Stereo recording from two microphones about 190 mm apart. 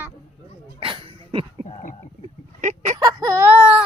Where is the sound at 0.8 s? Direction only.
25° right (ahead or behind).